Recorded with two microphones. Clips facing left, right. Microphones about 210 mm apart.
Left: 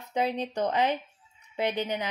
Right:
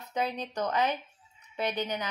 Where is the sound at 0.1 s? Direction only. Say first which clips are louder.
Left 4 dB; 30° left (ahead or behind).